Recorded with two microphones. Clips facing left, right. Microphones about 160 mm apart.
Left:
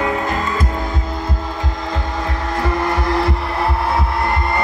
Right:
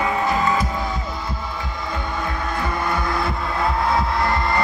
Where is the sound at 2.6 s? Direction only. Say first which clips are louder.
Left 5 dB; 90° left.